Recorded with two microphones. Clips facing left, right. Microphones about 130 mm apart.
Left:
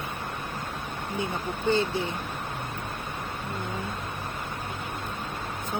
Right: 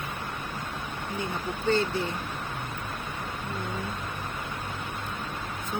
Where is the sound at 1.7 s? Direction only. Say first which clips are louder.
Even; 15° left (ahead or behind).